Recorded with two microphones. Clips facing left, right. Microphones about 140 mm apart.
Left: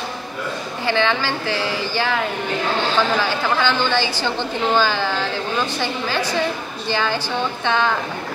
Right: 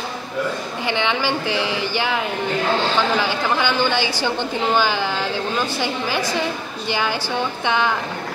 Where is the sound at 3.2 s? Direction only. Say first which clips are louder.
Even; 15° right (ahead or behind).